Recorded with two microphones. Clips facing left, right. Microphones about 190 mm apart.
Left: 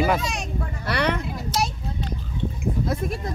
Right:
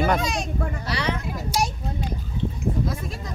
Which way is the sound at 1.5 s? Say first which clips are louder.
Right 1 dB; 10° right (ahead or behind).